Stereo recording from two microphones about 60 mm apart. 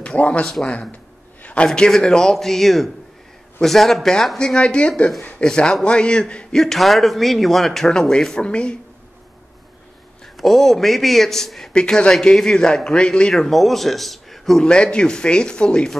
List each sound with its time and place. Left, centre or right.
0.0 s speech: centre
1.4 s a sound: left
1.7 s a man's voice: centre
4.4 s a man's voice: centre
10.2 s a man's voice: centre
11.7 s a man's voice: centre
14.6 s a man's voice: centre